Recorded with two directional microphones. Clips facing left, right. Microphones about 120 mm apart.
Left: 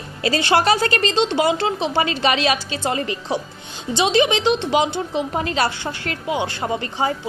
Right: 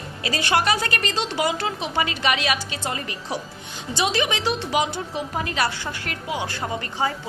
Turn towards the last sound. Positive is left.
turn(degrees=25)  # may be behind; listen again after turning